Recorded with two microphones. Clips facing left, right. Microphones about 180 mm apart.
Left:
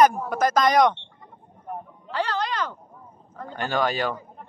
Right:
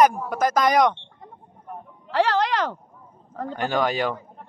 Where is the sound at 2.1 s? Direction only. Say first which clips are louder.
Right 6 dB; 90° right.